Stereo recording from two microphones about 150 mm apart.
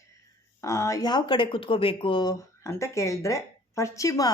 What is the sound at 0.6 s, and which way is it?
Speech, 20° left (ahead or behind).